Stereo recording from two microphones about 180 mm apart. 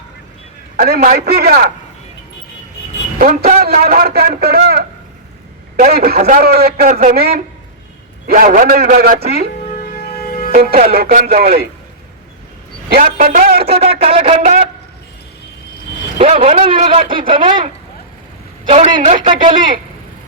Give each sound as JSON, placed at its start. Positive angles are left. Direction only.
{"t": 0.8, "sound": "a man's voice", "side_deg": -55}
{"t": 3.2, "sound": "a man's voice", "side_deg": -50}
{"t": 6.1, "sound": "speech", "side_deg": -40}
{"t": 6.4, "sound": "a man's voice", "side_deg": -60}
{"t": 9.7, "sound": "music", "side_deg": 55}
{"t": 10.5, "sound": "a man's voice", "side_deg": -55}
{"t": 12.9, "sound": "speech", "side_deg": -50}
{"t": 13.7, "sound": "speech", "side_deg": -35}
{"t": 16.1, "sound": "speech", "side_deg": -40}
{"t": 18.7, "sound": "speech", "side_deg": -35}